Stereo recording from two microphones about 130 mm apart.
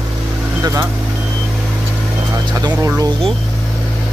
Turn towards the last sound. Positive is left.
turn(degrees=-25)  # may be behind; listen again after turning